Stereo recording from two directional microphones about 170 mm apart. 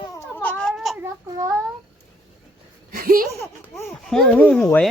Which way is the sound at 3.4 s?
15° left (ahead or behind).